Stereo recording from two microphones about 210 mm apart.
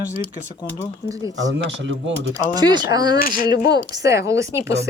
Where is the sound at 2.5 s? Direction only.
20° right (ahead or behind).